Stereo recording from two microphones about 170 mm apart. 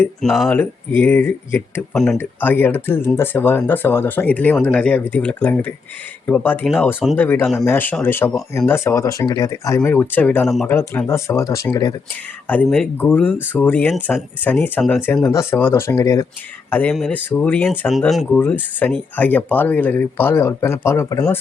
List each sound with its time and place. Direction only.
0.2 s speech: centre (ahead or behind)
10.7 s speech: 15° left (ahead or behind)
12.5 s speech: 5° left (ahead or behind)
17.7 s speech: centre (ahead or behind); by 21.2 s 20° left (ahead or behind)